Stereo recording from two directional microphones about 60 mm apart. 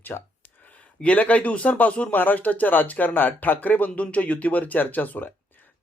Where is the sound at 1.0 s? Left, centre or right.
Left.